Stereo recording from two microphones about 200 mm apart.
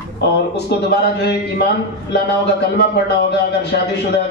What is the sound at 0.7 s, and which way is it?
Speech, 60° left (ahead or behind).